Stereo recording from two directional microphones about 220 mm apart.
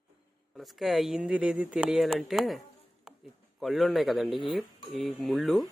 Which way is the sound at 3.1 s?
5° right (ahead or behind).